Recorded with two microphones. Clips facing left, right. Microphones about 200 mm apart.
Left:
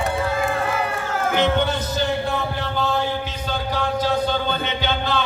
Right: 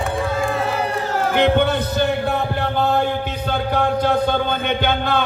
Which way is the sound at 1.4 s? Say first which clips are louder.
Right 4 dB; 60° right (ahead or behind).